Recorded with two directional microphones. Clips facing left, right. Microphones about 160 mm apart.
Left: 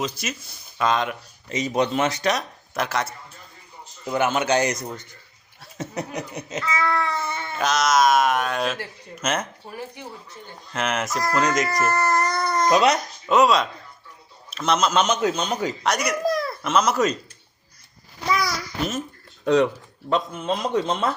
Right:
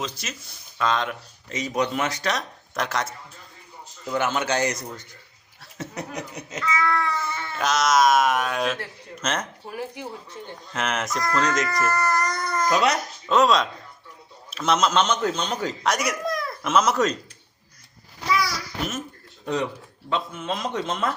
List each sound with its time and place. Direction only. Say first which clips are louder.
0.0 s a man's voice: left 4 dB; 10° left (ahead or behind)
2.3 s speech: left 2 dB; 5° left (ahead or behind)
4.0 s a man's voice: left 3 dB; 15° left (ahead or behind)
7.6 s a man's voice: even; centre (ahead or behind)
9.6 s speech: right 2 dB; 10° right (ahead or behind)
10.7 s a man's voice: left 2 dB; centre (ahead or behind)
11.6 s speech: left 2 dB; 25° left (ahead or behind)
13.2 s a man's voice: left 1 dB; 10° left (ahead or behind)
15.8 s speech: right 2 dB; centre (ahead or behind)
16.2 s a sound: left 5 dB; 35° left (ahead or behind)
16.6 s speech: even; centre (ahead or behind)
18.3 s a sound: left 1 dB; 45° left (ahead or behind)
20.1 s speech: left 4 dB; 40° left (ahead or behind)